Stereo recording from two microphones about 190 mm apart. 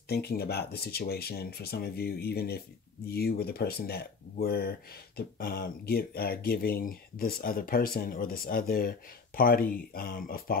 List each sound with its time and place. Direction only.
0.1 s speech: 55° left (ahead or behind)